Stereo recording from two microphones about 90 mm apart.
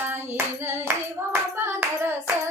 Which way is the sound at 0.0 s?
25° right (ahead or behind).